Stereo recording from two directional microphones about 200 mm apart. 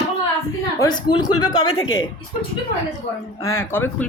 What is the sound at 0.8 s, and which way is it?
A woman's voice, 20° left (ahead or behind).